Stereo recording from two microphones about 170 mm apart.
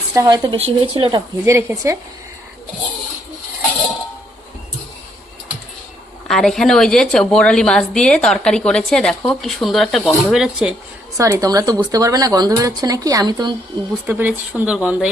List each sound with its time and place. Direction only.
0.1 s speech: 20° right (ahead or behind)
0.5 s speech: 35° right (ahead or behind)
1.5 s speech: 15° right (ahead or behind)
6.2 s a woman's voice: centre (ahead or behind)
11.2 s speech: 20° right (ahead or behind)
14.1 s speech: 10° right (ahead or behind)